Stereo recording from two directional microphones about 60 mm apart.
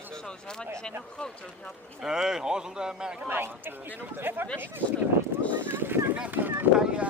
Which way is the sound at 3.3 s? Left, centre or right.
Right.